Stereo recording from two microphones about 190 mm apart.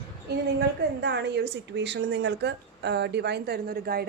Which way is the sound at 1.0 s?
65° right (ahead or behind).